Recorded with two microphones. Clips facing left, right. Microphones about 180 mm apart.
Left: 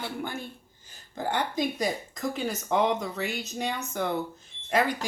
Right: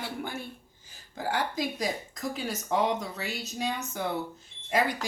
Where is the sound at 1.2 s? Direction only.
5° right (ahead or behind).